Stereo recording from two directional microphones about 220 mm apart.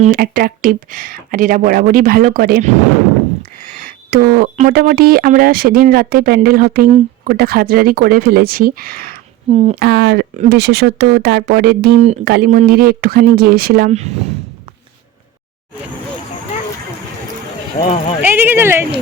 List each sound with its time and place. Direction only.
0.0 s speech: 40° right (ahead or behind)
3.7 s a sound: 40° right (ahead or behind)
4.5 s speech: 40° right (ahead or behind)
9.5 s speech: 30° right (ahead or behind)
9.7 s speech: 45° right (ahead or behind)
17.7 s speech: 35° left (ahead or behind)
18.2 s speech: 10° right (ahead or behind)